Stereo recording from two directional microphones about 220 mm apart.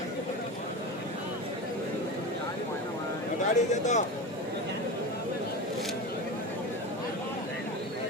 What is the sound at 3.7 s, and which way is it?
Speech, 35° left (ahead or behind).